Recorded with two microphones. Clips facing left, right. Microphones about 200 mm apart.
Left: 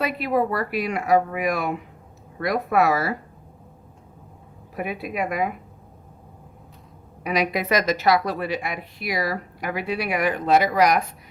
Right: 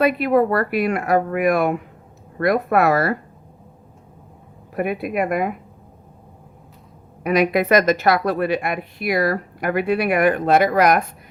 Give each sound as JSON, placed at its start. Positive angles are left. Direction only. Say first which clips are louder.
{"t": 0.0, "sound": "speech", "louder": "right 6 dB", "side_deg": -55}
{"t": 4.7, "sound": "speech", "louder": "right 6 dB", "side_deg": -55}
{"t": 7.3, "sound": "speech", "louder": "right 6 dB", "side_deg": -55}